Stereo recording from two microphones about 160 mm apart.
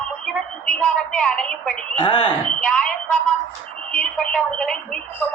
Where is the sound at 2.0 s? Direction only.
30° left (ahead or behind).